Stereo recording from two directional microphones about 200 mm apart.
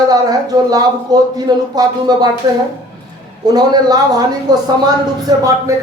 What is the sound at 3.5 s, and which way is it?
A man's voice, 20° right (ahead or behind).